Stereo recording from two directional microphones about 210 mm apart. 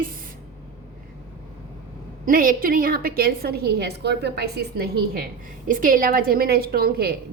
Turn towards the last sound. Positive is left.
turn(degrees=-45)  # may be behind; listen again after turning